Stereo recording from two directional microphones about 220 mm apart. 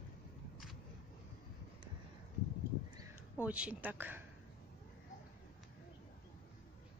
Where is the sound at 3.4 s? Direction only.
5° right (ahead or behind).